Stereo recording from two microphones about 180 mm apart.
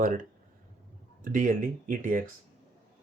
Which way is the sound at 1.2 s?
45° right (ahead or behind).